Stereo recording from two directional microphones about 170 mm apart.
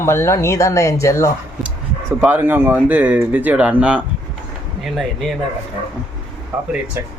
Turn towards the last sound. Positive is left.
turn(degrees=-5)  # may be behind; listen again after turning